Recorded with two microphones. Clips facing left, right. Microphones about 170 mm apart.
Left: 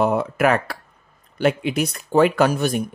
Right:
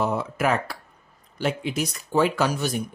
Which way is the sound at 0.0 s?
60° left (ahead or behind).